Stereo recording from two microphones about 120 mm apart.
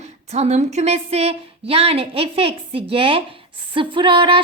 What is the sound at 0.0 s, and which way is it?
A woman's voice, 65° right (ahead or behind).